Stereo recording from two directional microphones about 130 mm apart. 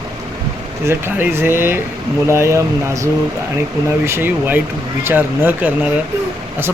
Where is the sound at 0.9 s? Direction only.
20° right (ahead or behind).